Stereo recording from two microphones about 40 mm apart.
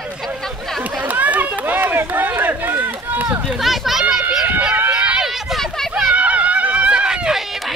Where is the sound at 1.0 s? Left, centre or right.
Right.